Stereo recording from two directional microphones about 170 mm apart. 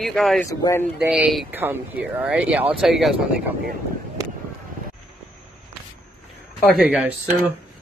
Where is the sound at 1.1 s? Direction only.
Centre (ahead or behind).